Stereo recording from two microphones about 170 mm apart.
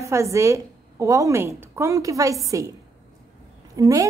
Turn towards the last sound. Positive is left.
turn(degrees=-20)  # may be behind; listen again after turning